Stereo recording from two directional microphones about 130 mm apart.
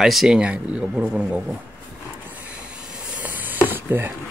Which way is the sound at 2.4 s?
10° right (ahead or behind).